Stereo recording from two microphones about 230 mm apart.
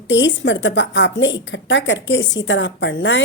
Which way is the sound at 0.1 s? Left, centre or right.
Left.